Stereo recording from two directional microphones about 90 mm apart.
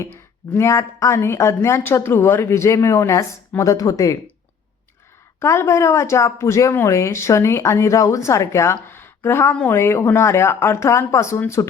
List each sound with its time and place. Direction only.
0.5 s speech: 35° left (ahead or behind)
5.4 s speech: 30° left (ahead or behind)